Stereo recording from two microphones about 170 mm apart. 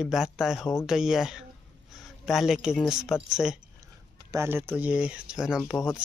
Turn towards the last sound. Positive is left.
turn(degrees=-5)  # may be behind; listen again after turning